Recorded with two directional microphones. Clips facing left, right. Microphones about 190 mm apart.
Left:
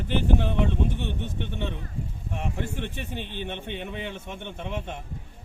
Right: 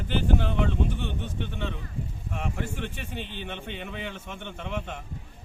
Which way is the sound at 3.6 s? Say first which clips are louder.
Left 2 dB; 20° left (ahead or behind).